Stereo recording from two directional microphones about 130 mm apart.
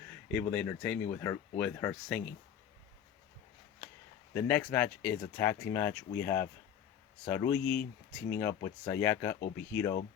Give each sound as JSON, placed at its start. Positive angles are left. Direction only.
{"t": 0.3, "sound": "speech", "side_deg": 10}
{"t": 4.4, "sound": "speech", "side_deg": 10}